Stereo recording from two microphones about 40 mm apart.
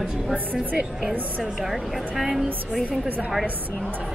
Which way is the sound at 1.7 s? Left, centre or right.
Centre.